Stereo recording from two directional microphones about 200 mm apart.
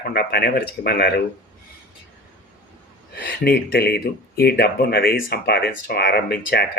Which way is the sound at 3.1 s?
55° left (ahead or behind).